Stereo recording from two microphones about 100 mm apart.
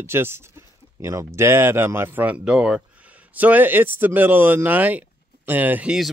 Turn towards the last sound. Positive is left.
turn(degrees=-15)  # may be behind; listen again after turning